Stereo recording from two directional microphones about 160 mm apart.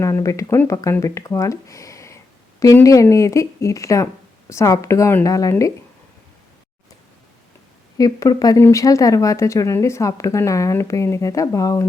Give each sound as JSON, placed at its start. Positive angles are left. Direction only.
{"t": 0.0, "sound": "speech", "side_deg": 20}
{"t": 7.9, "sound": "speech", "side_deg": 25}